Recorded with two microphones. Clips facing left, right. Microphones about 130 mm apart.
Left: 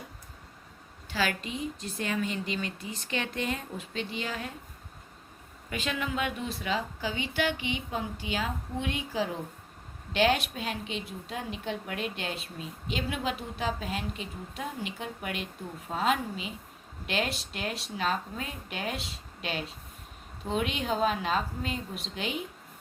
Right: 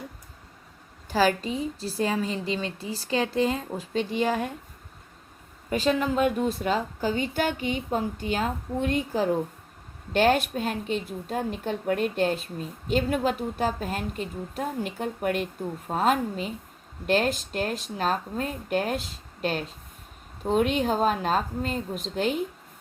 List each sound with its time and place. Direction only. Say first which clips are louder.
1.0 s a woman's voice: right 8 dB; 40° right (ahead or behind)
5.7 s a woman's voice: right 9 dB; 35° right (ahead or behind)